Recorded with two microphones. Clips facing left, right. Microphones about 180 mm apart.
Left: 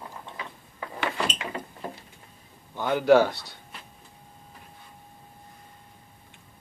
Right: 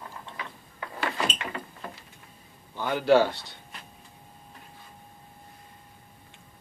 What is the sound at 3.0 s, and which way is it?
Speech, 15° left (ahead or behind).